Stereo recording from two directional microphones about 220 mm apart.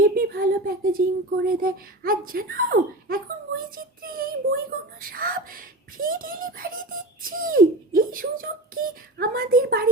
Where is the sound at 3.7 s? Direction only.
40° right (ahead or behind).